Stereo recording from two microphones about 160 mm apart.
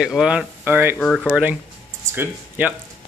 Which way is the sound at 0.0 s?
5° right (ahead or behind).